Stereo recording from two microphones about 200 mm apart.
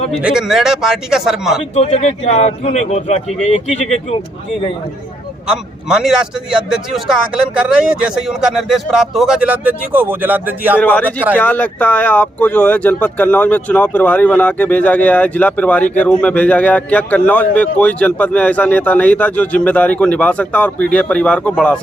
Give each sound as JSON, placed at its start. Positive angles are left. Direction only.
{"t": 0.2, "sound": "speech", "side_deg": -5}
{"t": 1.7, "sound": "a man's voice", "side_deg": 30}
{"t": 5.5, "sound": "speech", "side_deg": -5}
{"t": 10.8, "sound": "speech", "side_deg": 10}